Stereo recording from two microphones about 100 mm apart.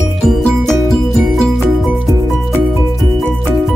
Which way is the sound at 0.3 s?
Centre (ahead or behind).